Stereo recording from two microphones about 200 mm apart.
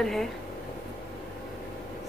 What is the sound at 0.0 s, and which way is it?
Speech, centre (ahead or behind).